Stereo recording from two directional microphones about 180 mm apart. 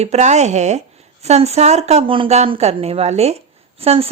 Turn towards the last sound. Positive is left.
turn(degrees=-35)  # may be behind; listen again after turning